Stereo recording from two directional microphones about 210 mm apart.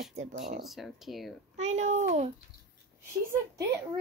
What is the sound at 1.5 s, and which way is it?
Speech, 35° right (ahead or behind).